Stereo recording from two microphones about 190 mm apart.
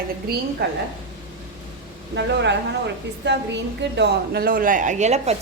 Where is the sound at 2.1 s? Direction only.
65° right (ahead or behind).